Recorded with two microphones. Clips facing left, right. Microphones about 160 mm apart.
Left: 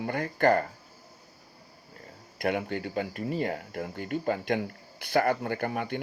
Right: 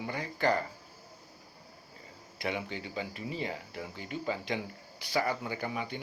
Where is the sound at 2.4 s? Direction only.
55° left (ahead or behind).